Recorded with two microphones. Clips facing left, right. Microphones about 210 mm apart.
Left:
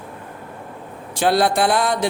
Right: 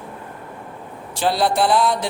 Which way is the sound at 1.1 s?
50° left (ahead or behind).